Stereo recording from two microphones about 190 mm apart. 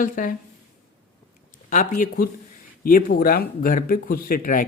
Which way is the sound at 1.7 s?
45° left (ahead or behind).